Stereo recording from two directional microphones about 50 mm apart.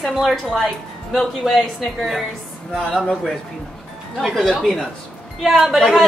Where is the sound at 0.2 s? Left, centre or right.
Centre.